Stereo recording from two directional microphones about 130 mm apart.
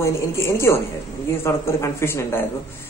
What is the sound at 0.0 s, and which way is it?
Speech, 20° left (ahead or behind).